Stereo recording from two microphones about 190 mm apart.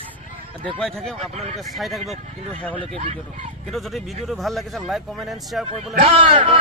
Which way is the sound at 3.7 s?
Centre (ahead or behind).